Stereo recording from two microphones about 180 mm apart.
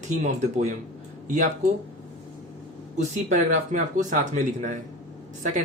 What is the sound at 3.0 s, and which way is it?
Speech, 45° right (ahead or behind).